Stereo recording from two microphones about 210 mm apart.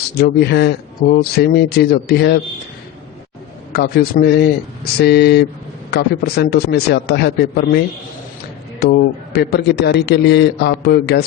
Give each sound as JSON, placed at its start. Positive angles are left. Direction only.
{"t": 0.1, "sound": "a man's voice", "side_deg": 50}
{"t": 3.7, "sound": "a man's voice", "side_deg": 50}
{"t": 8.8, "sound": "a man's voice", "side_deg": 50}